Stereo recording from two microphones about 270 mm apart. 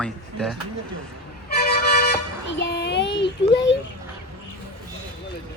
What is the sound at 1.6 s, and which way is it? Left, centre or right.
Vehicle, left.